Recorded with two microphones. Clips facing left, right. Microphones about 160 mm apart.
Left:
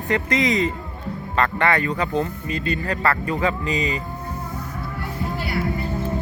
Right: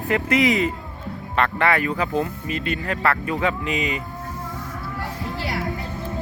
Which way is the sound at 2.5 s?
90° right.